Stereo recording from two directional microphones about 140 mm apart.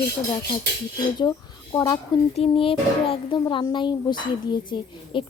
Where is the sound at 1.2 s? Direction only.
30° left (ahead or behind).